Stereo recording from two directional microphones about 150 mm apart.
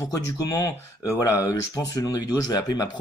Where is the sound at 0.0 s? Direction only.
25° left (ahead or behind).